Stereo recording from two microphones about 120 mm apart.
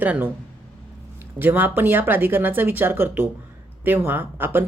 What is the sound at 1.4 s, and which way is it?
Speech, 15° right (ahead or behind).